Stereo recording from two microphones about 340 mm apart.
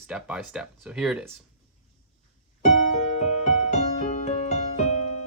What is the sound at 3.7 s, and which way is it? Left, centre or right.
Music, centre.